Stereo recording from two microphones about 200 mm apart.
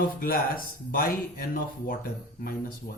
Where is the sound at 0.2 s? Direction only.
45° left (ahead or behind).